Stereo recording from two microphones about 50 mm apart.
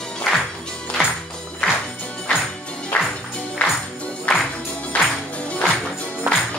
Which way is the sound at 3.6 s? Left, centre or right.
Left.